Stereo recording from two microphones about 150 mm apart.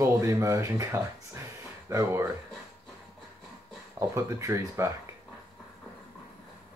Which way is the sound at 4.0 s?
20° right (ahead or behind).